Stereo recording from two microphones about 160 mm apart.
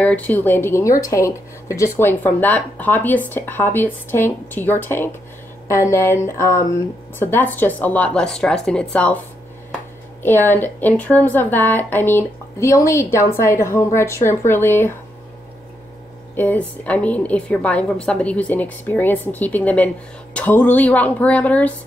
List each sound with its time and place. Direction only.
0.0 s speech: 10° left (ahead or behind)
10.2 s speech: 10° left (ahead or behind)
16.3 s speech: 10° left (ahead or behind)